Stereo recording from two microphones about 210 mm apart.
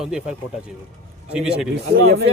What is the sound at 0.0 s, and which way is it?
Speech, 5° right (ahead or behind).